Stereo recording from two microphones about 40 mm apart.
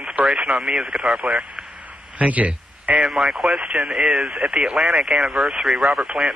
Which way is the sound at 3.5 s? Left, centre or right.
Right.